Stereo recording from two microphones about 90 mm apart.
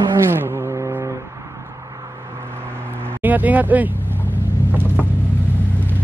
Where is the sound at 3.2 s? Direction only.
20° right (ahead or behind).